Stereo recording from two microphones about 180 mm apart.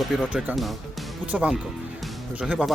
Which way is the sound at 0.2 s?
Centre (ahead or behind).